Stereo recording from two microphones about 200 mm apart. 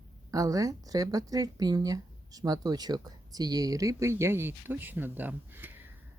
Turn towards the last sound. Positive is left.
turn(degrees=-10)  # may be behind; listen again after turning